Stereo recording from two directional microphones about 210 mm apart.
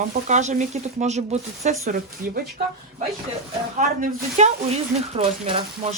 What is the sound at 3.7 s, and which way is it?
Speech, 35° right (ahead or behind).